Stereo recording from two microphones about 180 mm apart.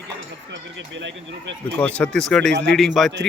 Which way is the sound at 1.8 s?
5° left (ahead or behind).